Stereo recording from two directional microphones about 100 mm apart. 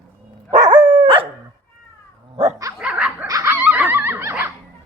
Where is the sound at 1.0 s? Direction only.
60° right (ahead or behind).